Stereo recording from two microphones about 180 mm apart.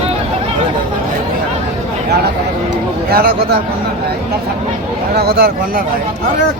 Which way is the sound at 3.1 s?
55° right (ahead or behind).